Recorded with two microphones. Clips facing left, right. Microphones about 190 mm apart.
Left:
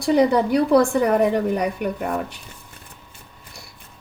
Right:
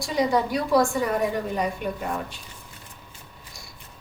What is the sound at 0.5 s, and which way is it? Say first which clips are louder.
A woman's voice: left 5 dB; 60° left (ahead or behind).